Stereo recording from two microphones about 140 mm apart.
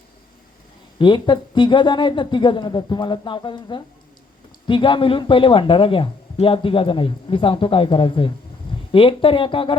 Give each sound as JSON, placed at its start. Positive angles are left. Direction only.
{"t": 0.9, "sound": "speech", "side_deg": 35}